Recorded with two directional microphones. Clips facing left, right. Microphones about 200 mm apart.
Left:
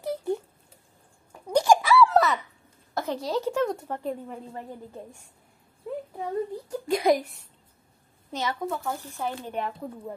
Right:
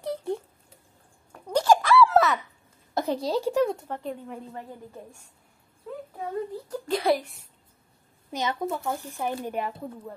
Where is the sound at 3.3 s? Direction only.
10° right (ahead or behind).